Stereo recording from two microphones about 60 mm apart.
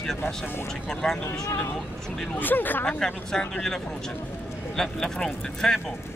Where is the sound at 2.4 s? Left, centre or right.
Left.